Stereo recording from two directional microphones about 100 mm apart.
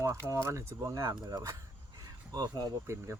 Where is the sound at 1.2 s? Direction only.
35° right (ahead or behind).